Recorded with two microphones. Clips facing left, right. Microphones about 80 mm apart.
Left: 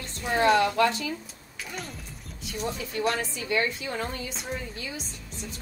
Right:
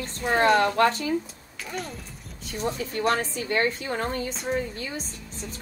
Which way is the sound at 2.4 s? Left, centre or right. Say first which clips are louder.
Right 3 dB; right.